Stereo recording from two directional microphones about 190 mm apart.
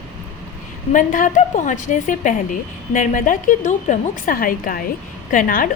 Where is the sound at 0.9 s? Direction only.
45° left (ahead or behind).